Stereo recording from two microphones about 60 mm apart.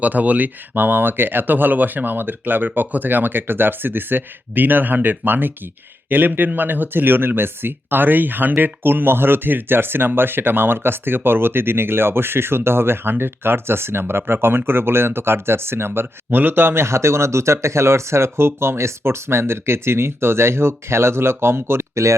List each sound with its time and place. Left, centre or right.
0.0 s speech: right